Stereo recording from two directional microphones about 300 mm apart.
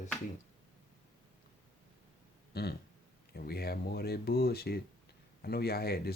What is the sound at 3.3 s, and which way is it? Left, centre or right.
Speech, left.